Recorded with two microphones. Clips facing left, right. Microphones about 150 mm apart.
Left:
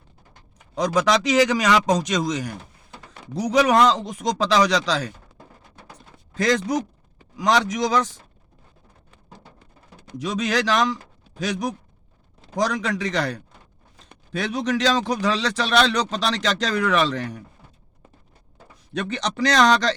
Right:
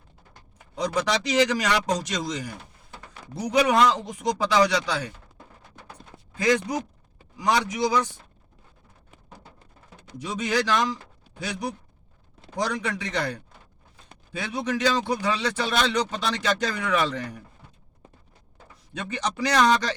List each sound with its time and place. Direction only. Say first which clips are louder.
0.8 s a man's voice: left 5 dB; 90° left
7.3 s a man's voice: left 3 dB; 90° left
10.2 s a man's voice: left 3 dB; 80° left
11.3 s a man's voice: left 5 dB; 90° left
18.9 s a man's voice: left 4 dB; 75° left (ahead or behind)